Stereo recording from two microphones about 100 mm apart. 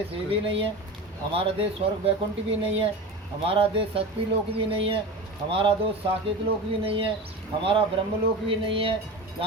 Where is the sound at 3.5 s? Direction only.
65° right (ahead or behind).